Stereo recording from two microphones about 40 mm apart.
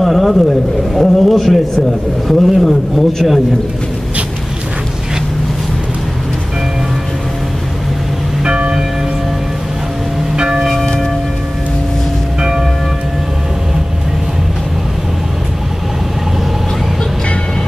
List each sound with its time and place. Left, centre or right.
0.0 s a sound: centre
0.9 s a man's voice: centre
8.5 s church bell: right
10.3 s church bell: right
10.6 s church bell: centre
12.4 s church bell: centre